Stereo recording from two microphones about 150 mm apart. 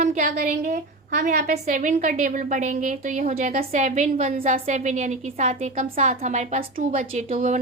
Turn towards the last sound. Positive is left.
turn(degrees=-60)  # may be behind; listen again after turning